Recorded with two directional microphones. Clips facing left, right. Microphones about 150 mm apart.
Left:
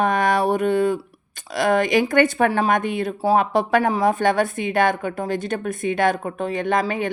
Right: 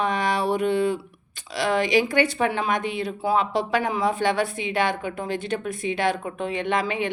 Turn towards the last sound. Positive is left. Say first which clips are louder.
# left 3 dB
turn(degrees=45)  # may be behind; listen again after turning